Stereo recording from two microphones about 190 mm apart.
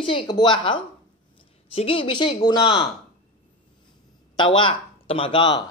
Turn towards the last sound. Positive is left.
turn(degrees=25)  # may be behind; listen again after turning